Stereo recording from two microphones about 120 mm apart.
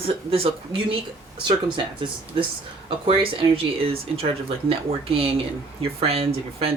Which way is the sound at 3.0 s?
50° right (ahead or behind).